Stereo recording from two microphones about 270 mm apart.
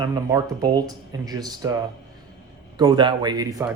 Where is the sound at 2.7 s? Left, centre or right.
Centre.